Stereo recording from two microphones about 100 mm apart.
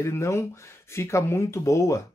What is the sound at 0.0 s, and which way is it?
Speech, 25° left (ahead or behind).